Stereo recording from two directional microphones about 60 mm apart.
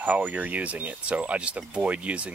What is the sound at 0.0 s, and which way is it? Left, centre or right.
Speech, right.